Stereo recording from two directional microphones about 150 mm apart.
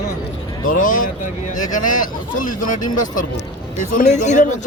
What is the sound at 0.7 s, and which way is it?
Speech, 60° left (ahead or behind).